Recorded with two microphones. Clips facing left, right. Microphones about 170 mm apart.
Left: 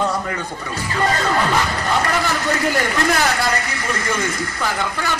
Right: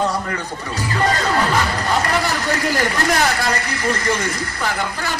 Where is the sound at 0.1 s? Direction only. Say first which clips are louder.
Even; 35° right (ahead or behind).